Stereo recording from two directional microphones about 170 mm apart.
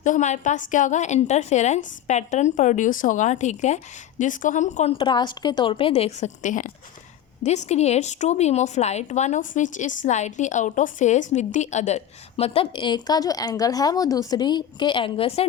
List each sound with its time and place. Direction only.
0.0 s a woman's voice: 45° left (ahead or behind)